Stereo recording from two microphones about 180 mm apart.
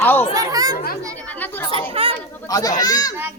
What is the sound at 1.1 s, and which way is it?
Speech, 10° left (ahead or behind).